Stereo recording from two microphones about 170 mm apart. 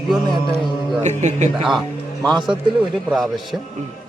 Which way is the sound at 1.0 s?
45° right (ahead or behind).